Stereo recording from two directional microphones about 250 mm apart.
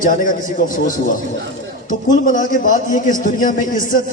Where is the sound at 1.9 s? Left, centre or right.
Left.